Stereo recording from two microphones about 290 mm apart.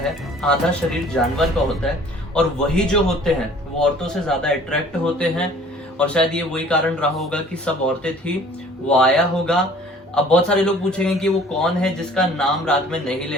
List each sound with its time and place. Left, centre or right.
0.1 s a man's voice: centre